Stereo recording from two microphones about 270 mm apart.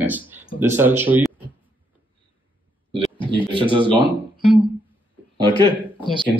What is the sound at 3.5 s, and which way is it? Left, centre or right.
Speech, centre.